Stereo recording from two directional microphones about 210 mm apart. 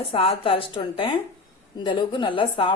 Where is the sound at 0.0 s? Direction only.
25° left (ahead or behind).